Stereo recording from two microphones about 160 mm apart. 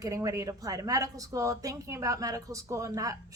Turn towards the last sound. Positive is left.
turn(degrees=-20)  # may be behind; listen again after turning